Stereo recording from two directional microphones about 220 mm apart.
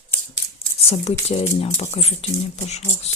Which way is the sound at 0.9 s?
25° left (ahead or behind).